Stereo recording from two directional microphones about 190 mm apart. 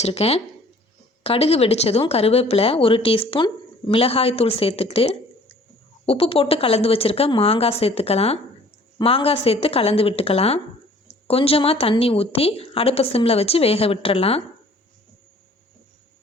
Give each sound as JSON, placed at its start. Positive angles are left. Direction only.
{"t": 0.0, "sound": "speech", "side_deg": 35}